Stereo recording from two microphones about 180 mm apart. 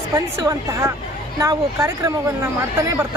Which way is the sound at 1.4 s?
15° right (ahead or behind).